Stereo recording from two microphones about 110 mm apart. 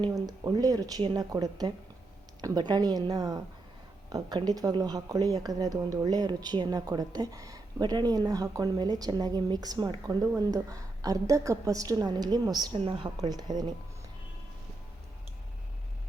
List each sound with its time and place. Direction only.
0.0 s speech: 35° right (ahead or behind)
10.4 s speech: 35° right (ahead or behind)
12.7 s a woman's voice: 55° right (ahead or behind); by 13.7 s 40° right (ahead or behind)